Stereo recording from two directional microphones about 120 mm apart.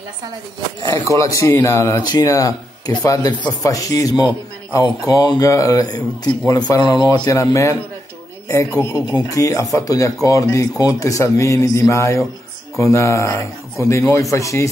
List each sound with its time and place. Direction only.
1.1 s speech: 25° left (ahead or behind)